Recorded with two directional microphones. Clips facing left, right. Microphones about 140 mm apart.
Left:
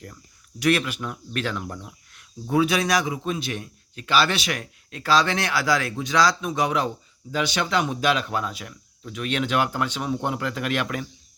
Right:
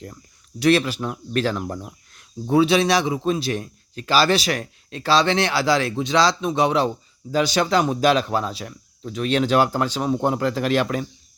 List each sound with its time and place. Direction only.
0.6 s a man's voice: 30° right (ahead or behind)